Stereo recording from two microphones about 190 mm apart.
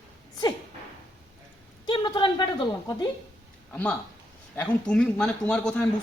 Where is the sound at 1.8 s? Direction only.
25° left (ahead or behind).